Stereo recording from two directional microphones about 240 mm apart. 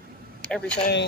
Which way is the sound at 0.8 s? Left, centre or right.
Left.